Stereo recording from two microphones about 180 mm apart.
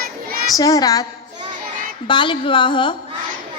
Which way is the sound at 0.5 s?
20° left (ahead or behind).